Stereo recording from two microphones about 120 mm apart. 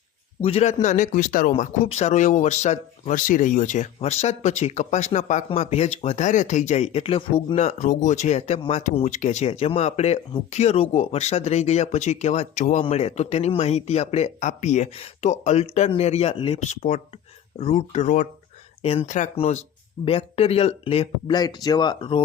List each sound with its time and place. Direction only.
0.4 s speech: 65° left (ahead or behind); by 5.5 s 85° left
5.5 s speech: 65° left (ahead or behind)
7.5 s speech: 70° left (ahead or behind); by 12.8 s 90° left
12.9 s speech: 60° left (ahead or behind)
16.6 s speech: 85° left
17.6 s speech: 65° left (ahead or behind); by 18.3 s 85° left
18.8 s speech: 55° left (ahead or behind)
19.0 s speech: 85° left; by 19.6 s 65° left (ahead or behind)
20.1 s speech: 55° left (ahead or behind)
21.3 s speech: 35° left (ahead or behind)